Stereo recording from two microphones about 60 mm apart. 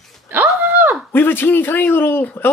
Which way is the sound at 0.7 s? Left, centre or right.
Right.